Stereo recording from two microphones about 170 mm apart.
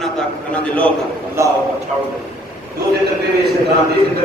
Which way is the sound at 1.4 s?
15° right (ahead or behind).